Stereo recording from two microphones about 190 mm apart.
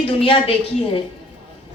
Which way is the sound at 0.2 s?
30° left (ahead or behind).